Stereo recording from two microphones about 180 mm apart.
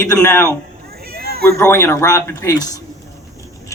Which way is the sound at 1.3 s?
60° right (ahead or behind).